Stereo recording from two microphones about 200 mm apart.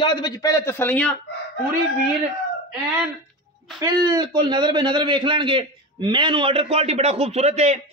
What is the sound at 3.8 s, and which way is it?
A man's voice, 20° right (ahead or behind).